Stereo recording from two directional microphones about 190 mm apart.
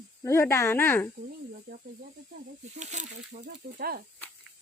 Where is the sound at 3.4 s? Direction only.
50° right (ahead or behind).